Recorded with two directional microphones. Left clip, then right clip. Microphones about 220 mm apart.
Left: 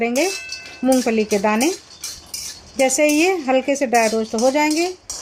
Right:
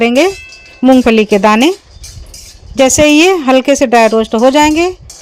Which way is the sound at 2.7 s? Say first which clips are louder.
Right 9 dB; 45° right (ahead or behind).